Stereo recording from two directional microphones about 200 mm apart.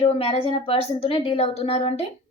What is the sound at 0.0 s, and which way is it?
A woman's voice, 30° left (ahead or behind).